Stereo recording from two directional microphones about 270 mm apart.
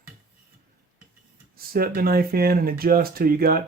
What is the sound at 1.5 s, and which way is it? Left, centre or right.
Speech, right.